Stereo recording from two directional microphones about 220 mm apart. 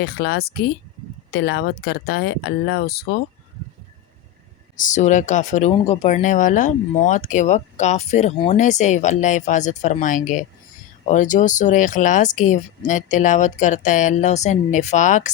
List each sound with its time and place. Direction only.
0.0 s speech: 45° left (ahead or behind)
4.8 s speech: 35° left (ahead or behind)